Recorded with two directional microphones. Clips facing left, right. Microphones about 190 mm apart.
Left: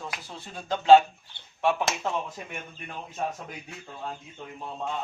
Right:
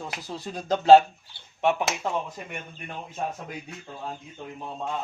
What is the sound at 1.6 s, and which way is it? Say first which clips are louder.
Speech: right 2 dB; 20° right (ahead or behind).